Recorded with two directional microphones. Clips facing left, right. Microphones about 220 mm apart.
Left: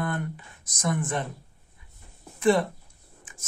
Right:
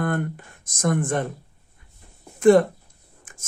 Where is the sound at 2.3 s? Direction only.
50° right (ahead or behind).